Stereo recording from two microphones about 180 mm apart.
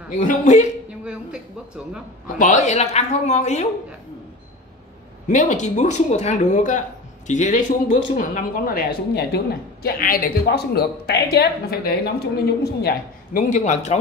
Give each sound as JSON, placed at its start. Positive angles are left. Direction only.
{"t": 0.2, "sound": "speech", "side_deg": 40}
{"t": 2.2, "sound": "speech", "side_deg": 45}
{"t": 5.3, "sound": "speech", "side_deg": 40}